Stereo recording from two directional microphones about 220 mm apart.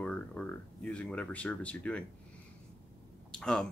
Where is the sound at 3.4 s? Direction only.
5° left (ahead or behind).